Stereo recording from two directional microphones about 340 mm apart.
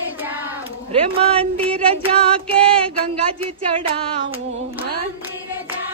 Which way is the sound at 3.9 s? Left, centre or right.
Centre.